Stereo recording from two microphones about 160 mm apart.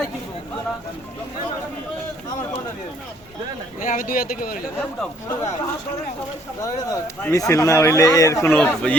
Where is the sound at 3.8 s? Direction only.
60° left (ahead or behind).